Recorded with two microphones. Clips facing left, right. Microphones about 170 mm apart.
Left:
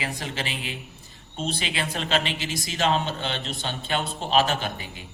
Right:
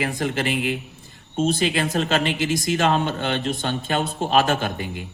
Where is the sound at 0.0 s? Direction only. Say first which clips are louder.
Right 8 dB; 50° right (ahead or behind).